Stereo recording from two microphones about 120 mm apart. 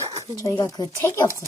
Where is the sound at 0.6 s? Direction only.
30° left (ahead or behind).